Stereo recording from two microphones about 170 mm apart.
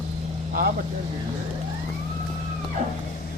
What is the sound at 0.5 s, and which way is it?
Vehicle, 60° right (ahead or behind).